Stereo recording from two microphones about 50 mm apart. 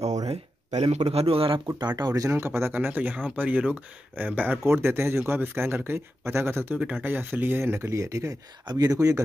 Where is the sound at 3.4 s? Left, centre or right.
Right.